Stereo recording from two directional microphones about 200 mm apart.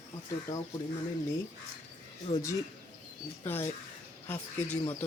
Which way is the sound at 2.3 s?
30° left (ahead or behind).